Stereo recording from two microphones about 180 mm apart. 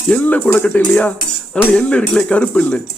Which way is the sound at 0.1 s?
10° left (ahead or behind).